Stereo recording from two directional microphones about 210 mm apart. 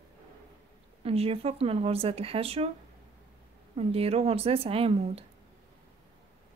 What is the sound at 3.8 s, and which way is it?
Speech, 30° right (ahead or behind).